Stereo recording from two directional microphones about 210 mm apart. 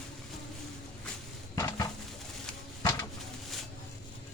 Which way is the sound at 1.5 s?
20° left (ahead or behind).